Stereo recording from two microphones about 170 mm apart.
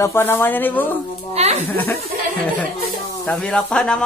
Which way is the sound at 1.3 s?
40° right (ahead or behind).